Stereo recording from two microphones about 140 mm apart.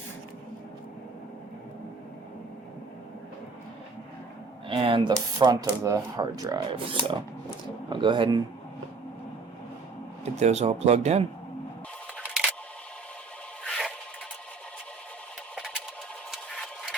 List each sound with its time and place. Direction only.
4.7 s speech: 40° right (ahead or behind)
10.2 s a man's voice: 50° right (ahead or behind)
12.3 s camera: 10° right (ahead or behind)
13.7 s a sound: centre (ahead or behind)
15.5 s a sound: 5° right (ahead or behind)
16.3 s scissors: centre (ahead or behind)